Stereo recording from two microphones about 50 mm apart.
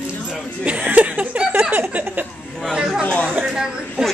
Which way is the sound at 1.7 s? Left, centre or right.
Right.